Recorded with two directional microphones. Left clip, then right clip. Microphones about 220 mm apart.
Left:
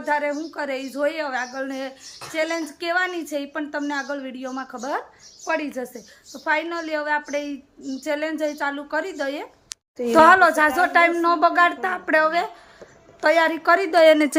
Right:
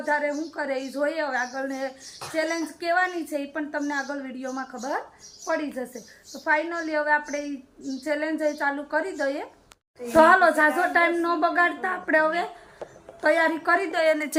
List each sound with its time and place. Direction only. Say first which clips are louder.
0.0 s a woman's voice: left 2 dB; 5° left (ahead or behind)
13.9 s a woman's voice: left 12 dB; 35° left (ahead or behind)